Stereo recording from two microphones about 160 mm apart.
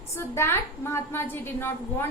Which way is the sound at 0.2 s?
15° left (ahead or behind).